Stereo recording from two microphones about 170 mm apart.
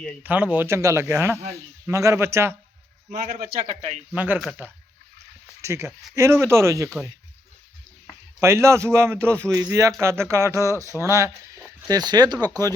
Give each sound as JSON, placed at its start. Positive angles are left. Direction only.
{"t": 0.2, "sound": "speech", "side_deg": -10}
{"t": 3.1, "sound": "a man's voice", "side_deg": -60}
{"t": 4.1, "sound": "speech", "side_deg": -10}
{"t": 5.6, "sound": "speech", "side_deg": -15}
{"t": 8.4, "sound": "speech", "side_deg": -15}